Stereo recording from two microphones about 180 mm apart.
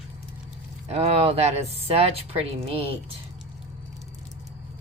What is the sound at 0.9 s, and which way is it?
Speech, 35° right (ahead or behind).